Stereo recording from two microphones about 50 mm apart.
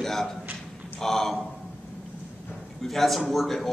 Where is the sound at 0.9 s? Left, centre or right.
Centre.